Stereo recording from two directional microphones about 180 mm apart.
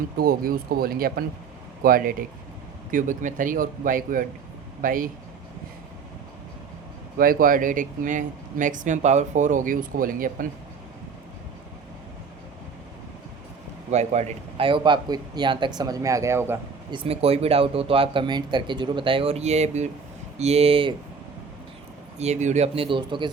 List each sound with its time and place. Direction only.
0.2 s speech: 55° right (ahead or behind)
7.2 s speech: 50° right (ahead or behind)
13.9 s a man's voice: 40° right (ahead or behind); by 16.6 s 15° right (ahead or behind)
16.9 s speech: 30° right (ahead or behind)
22.2 s speech: 40° right (ahead or behind)